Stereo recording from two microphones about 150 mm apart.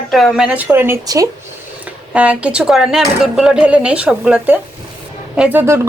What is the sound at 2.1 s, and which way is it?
A woman's voice, 10° right (ahead or behind).